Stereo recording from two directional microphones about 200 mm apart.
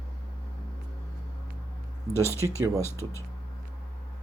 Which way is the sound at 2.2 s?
15° right (ahead or behind).